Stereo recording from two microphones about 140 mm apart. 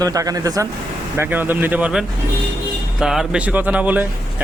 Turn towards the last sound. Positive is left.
turn(degrees=-10)  # may be behind; listen again after turning